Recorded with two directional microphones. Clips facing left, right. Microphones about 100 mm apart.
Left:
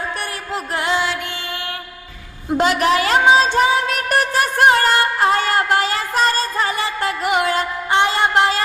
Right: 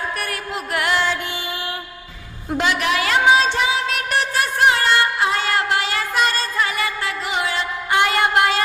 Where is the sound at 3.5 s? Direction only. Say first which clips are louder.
Left 4 dB; 45° left (ahead or behind).